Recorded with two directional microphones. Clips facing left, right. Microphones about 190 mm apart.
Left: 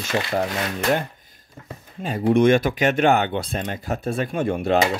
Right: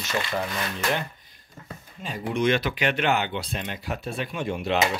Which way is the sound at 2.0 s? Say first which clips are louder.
Left 9 dB; 50° left (ahead or behind).